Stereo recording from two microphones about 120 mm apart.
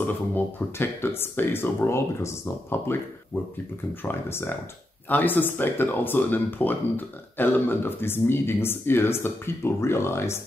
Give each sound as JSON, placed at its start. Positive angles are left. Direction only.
{"t": 0.0, "sound": "speech", "side_deg": 20}
{"t": 4.0, "sound": "speech", "side_deg": 20}